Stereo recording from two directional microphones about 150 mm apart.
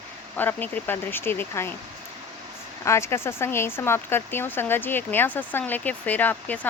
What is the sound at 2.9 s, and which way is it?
Speech, 20° left (ahead or behind).